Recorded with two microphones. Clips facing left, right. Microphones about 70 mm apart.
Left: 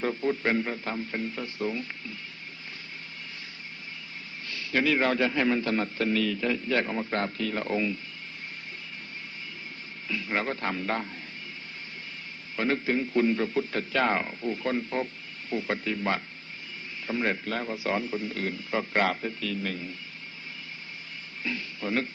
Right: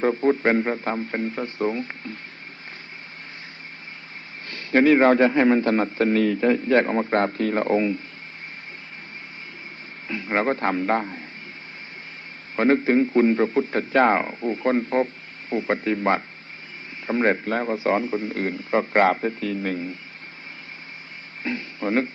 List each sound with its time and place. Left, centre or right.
0.0 s a man's voice: right
4.4 s a man's voice: right
10.1 s a man's voice: right
12.5 s a man's voice: right
21.4 s a man's voice: right